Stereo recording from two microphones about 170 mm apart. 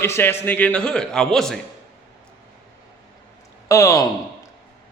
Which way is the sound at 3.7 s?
20° left (ahead or behind).